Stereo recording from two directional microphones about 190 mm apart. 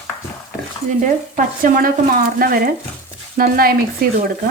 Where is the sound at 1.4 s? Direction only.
50° right (ahead or behind).